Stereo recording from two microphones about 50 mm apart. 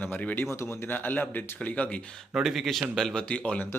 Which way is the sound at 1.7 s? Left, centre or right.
Left.